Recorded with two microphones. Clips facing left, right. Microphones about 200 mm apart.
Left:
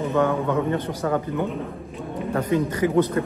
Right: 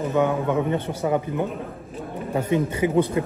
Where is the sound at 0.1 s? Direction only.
15° right (ahead or behind).